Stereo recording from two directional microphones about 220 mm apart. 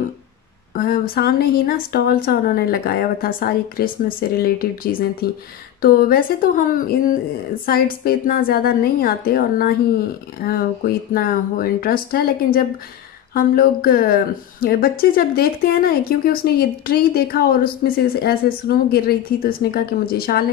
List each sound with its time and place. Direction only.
0.7 s a woman's voice: 40° left (ahead or behind)